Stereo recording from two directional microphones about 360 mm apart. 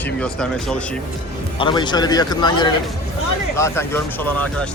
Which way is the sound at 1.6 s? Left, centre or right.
Centre.